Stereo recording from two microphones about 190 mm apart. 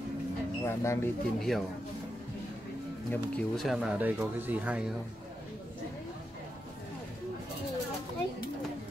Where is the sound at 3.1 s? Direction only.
Centre (ahead or behind).